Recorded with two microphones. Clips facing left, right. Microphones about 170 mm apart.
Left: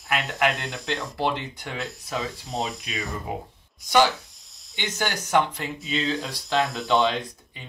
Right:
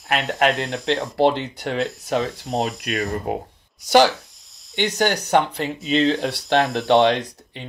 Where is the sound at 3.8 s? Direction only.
75° right (ahead or behind).